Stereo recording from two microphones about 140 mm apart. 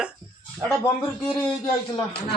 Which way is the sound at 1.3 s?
10° left (ahead or behind).